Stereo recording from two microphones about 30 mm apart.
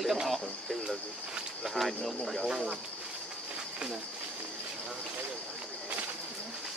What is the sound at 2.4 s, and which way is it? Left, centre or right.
Speech, centre.